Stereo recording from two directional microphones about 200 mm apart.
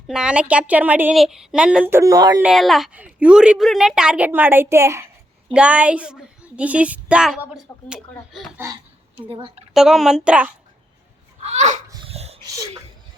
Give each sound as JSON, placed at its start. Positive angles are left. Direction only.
{"t": 0.1, "sound": "speech", "side_deg": -5}
{"t": 2.4, "sound": "a woman's voice", "side_deg": 0}
{"t": 8.5, "sound": "speech", "side_deg": -15}
{"t": 9.3, "sound": "a woman's voice", "side_deg": -25}
{"t": 9.7, "sound": "a woman's voice", "side_deg": 0}
{"t": 11.4, "sound": "speech", "side_deg": -35}
{"t": 12.0, "sound": "a sound", "side_deg": -30}